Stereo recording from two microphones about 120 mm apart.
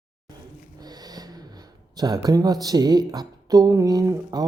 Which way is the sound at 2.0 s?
35° right (ahead or behind).